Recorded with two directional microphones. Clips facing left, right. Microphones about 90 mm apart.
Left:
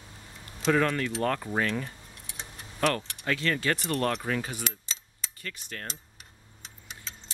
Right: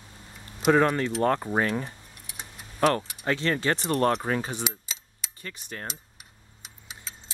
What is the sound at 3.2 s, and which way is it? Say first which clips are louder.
Speech: right 2 dB; 30° right (ahead or behind).